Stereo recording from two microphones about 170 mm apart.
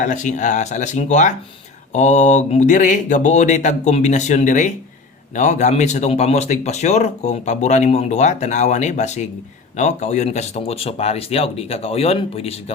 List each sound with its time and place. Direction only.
0.0 s speech: 45° left (ahead or behind)